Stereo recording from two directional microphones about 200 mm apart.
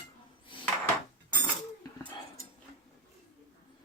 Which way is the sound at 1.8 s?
20° left (ahead or behind).